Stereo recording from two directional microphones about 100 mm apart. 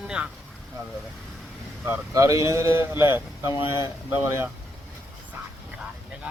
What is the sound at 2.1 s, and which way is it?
Speech, 35° right (ahead or behind).